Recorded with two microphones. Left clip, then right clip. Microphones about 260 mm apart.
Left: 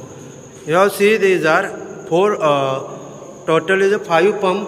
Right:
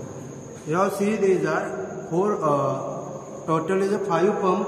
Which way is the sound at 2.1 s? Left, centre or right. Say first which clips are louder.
Left 8 dB; centre.